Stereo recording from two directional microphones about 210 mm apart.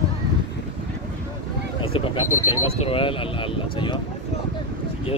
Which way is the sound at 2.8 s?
25° left (ahead or behind).